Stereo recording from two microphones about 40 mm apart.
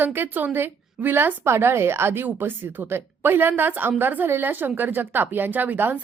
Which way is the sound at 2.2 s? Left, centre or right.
Right.